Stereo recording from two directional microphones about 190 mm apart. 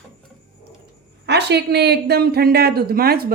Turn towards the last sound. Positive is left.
turn(degrees=-55)  # may be behind; listen again after turning